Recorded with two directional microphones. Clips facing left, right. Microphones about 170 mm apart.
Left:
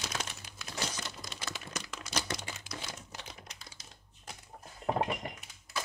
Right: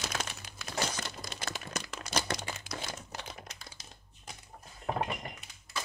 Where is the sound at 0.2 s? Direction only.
50° right (ahead or behind); by 3.6 s 65° right (ahead or behind).